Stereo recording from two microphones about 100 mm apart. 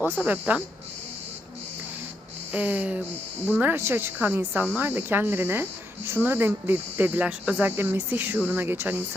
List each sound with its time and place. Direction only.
0.0 s speech: 15° right (ahead or behind)
2.5 s speech: 15° right (ahead or behind)